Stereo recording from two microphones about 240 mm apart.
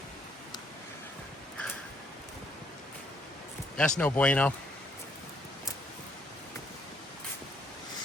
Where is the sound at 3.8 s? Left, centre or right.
Centre.